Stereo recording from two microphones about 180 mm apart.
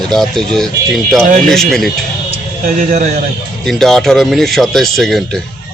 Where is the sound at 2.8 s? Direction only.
40° right (ahead or behind).